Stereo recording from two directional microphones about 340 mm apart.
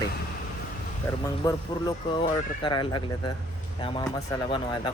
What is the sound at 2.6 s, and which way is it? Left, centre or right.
Speech, centre.